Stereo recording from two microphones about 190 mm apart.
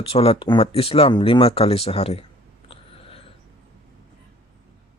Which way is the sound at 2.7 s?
30° left (ahead or behind).